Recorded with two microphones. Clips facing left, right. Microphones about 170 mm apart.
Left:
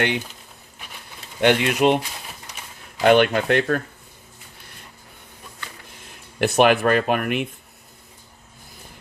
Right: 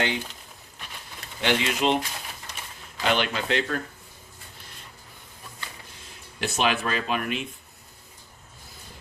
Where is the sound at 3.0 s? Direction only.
55° left (ahead or behind).